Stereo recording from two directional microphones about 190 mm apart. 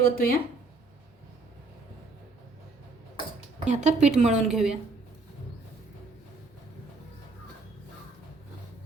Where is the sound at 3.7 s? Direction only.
35° right (ahead or behind).